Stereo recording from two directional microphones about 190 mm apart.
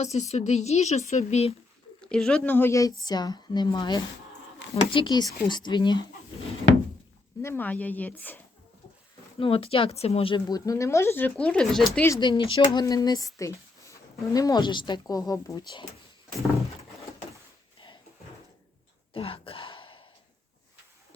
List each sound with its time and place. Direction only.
0.0 s speech: 35° left (ahead or behind)
2.0 s speech: 5° left (ahead or behind); by 6.0 s 25° left (ahead or behind)
7.4 s speech: 10° left (ahead or behind)
9.4 s speech: 30° left (ahead or behind); by 11.8 s 5° left (ahead or behind)
11.9 s speech: 15° left (ahead or behind)
17.7 s drawer open or close: 25° left (ahead or behind)
19.1 s a sound: 30° left (ahead or behind)